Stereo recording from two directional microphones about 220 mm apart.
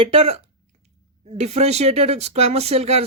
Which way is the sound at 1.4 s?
30° right (ahead or behind).